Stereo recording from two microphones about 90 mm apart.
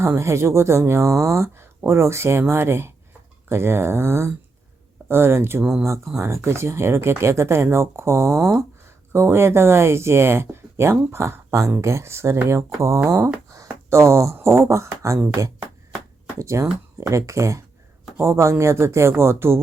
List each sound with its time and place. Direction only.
0.0 s speech: 30° right (ahead or behind)
16.4 s speech: 35° right (ahead or behind)